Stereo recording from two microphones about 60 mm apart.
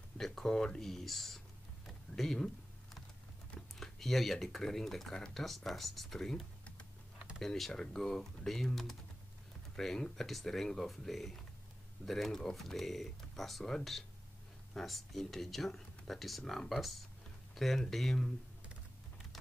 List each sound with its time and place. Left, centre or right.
0.2 s speech: centre
1.9 s typing: centre
3.8 s speech: centre